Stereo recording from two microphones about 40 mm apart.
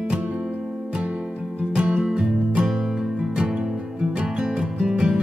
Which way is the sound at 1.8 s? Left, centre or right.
Right.